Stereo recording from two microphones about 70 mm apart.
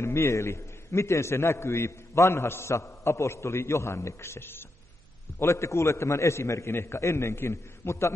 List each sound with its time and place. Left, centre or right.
0.0 s a man's voice: left